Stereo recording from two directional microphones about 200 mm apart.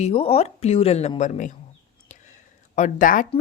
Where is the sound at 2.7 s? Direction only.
40° left (ahead or behind).